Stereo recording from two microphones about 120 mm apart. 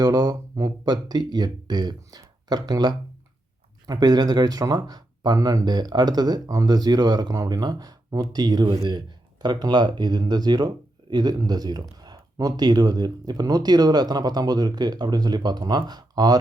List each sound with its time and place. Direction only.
0.0 s speech: 30° right (ahead or behind)